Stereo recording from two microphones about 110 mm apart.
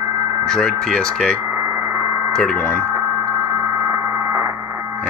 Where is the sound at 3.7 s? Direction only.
25° right (ahead or behind).